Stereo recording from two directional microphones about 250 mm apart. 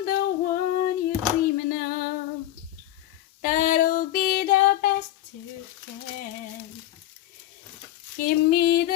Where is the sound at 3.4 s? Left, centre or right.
Left.